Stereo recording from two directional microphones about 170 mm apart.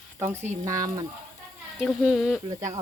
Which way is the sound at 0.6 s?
20° right (ahead or behind).